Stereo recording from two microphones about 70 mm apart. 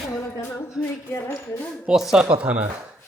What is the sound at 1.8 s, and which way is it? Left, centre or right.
Speech, centre.